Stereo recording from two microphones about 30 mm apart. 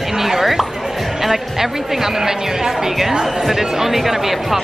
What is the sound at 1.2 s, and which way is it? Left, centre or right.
Speech, centre.